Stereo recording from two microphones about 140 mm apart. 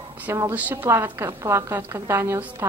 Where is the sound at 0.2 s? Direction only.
15° right (ahead or behind).